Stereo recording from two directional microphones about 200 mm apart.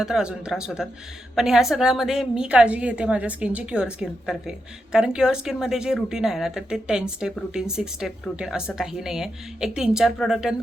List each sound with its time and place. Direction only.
0.0 s a woman's voice: 5° right (ahead or behind)